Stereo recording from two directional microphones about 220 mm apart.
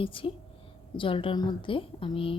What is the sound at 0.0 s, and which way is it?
A woman's voice, 25° left (ahead or behind).